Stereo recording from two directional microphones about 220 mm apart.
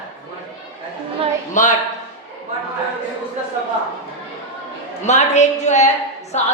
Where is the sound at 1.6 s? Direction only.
35° left (ahead or behind).